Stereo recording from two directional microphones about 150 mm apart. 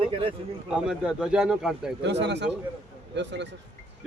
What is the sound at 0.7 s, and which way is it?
Speech, 5° right (ahead or behind).